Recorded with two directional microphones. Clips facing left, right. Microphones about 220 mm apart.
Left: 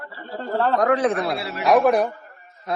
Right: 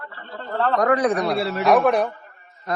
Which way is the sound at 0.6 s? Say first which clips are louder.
Even; centre (ahead or behind).